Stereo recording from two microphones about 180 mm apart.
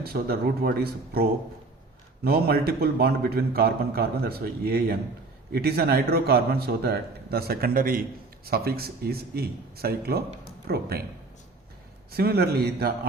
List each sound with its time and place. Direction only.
0.0 s a man's voice: 60° right (ahead or behind)
12.1 s a man's voice: 60° right (ahead or behind)